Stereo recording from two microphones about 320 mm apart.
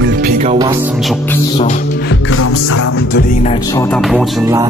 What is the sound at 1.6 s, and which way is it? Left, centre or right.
Music, left.